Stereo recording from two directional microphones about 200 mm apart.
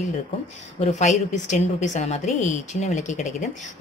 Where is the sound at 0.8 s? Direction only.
35° left (ahead or behind).